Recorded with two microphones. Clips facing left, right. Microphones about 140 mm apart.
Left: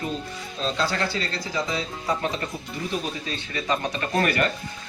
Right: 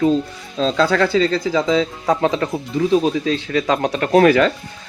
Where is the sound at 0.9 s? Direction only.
90° right.